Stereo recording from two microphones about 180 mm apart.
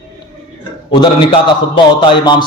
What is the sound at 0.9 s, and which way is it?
A man's voice, 25° left (ahead or behind).